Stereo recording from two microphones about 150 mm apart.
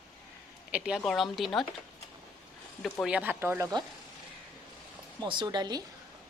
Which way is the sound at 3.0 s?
10° right (ahead or behind).